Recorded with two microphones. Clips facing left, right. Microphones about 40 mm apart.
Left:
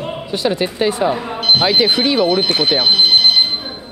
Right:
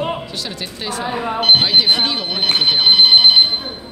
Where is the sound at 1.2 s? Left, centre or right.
Right.